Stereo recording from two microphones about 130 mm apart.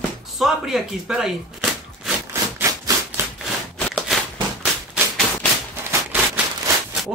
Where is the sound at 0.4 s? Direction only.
Centre (ahead or behind).